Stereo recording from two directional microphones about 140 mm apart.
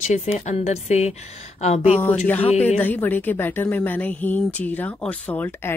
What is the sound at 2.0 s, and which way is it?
Speech, 10° left (ahead or behind).